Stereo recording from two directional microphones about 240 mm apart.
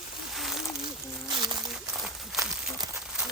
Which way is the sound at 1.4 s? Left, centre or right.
Centre.